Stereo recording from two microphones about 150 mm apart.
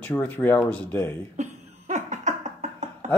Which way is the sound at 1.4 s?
55° right (ahead or behind).